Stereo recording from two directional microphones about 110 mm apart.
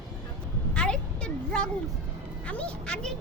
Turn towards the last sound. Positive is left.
turn(degrees=10)  # may be behind; listen again after turning